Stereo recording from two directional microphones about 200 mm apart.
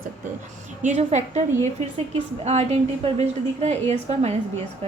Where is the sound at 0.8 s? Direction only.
35° right (ahead or behind).